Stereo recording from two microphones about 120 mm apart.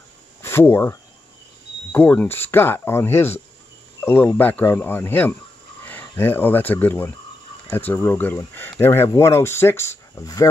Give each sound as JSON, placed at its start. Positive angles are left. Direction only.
{"t": 0.4, "sound": "speech", "side_deg": 20}